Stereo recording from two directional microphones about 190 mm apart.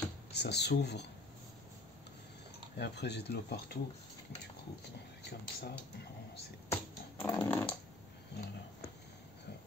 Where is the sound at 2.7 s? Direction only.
60° left (ahead or behind).